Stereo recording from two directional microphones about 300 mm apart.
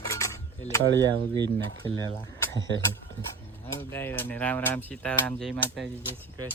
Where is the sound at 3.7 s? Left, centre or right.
Centre.